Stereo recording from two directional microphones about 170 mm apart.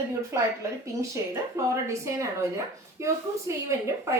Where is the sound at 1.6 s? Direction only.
15° right (ahead or behind).